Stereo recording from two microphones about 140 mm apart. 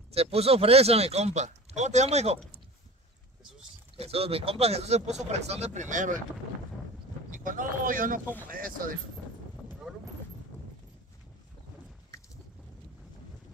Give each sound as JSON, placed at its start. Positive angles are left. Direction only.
{"t": 0.1, "sound": "speech", "side_deg": -45}
{"t": 3.9, "sound": "speech", "side_deg": -45}
{"t": 7.2, "sound": "speech", "side_deg": -75}
{"t": 8.5, "sound": "speech", "side_deg": -90}
{"t": 9.9, "sound": "a sound", "side_deg": -5}